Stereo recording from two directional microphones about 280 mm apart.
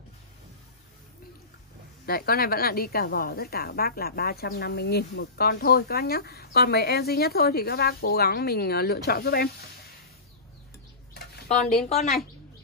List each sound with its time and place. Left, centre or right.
2.0 s a woman's voice: left
11.1 s a sound: left
11.9 s speech: left